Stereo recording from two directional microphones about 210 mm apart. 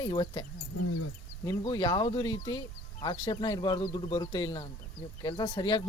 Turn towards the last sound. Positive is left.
turn(degrees=20)  # may be behind; listen again after turning